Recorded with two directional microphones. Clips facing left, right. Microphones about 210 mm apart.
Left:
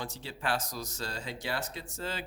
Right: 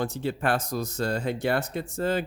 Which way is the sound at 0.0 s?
55° right (ahead or behind).